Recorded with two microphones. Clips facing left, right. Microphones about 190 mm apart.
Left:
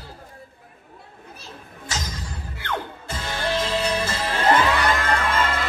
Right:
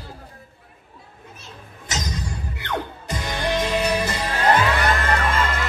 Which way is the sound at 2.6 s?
15° right (ahead or behind).